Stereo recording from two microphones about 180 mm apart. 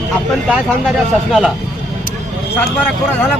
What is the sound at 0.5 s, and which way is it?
Speech, 5° right (ahead or behind).